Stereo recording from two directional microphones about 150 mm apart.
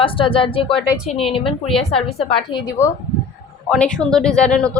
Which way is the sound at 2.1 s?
40° left (ahead or behind).